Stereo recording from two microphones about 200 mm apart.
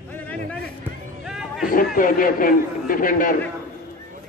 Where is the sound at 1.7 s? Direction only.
45° left (ahead or behind).